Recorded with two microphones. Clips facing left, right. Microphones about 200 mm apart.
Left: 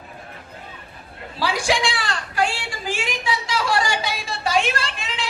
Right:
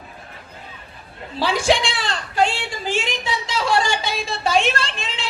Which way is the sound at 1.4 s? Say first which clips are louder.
Right 3 dB; 25° right (ahead or behind).